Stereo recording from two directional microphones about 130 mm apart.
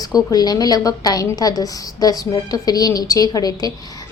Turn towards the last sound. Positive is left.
turn(degrees=30)  # may be behind; listen again after turning